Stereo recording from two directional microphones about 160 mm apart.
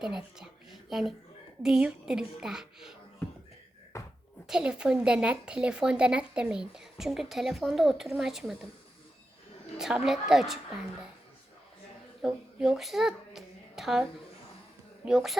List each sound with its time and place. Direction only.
0.0 s a woman's voice: 5° right (ahead or behind)
3.9 s bouncing: 20° left (ahead or behind)
4.4 s speech: 5° right (ahead or behind)
9.7 s speech: 5° right (ahead or behind)
12.2 s a child's voice: 5° right (ahead or behind)